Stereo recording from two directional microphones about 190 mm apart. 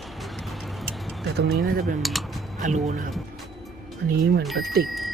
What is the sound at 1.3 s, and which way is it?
Speech, 55° right (ahead or behind).